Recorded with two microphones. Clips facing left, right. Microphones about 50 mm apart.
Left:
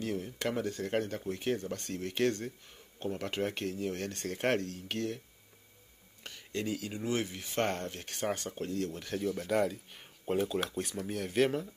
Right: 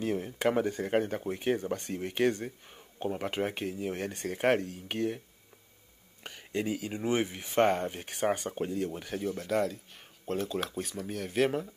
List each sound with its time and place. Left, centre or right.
0.0 s speech: right
6.2 s speech: centre